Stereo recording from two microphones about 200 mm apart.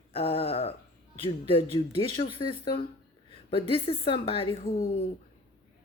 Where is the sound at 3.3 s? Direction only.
25° left (ahead or behind).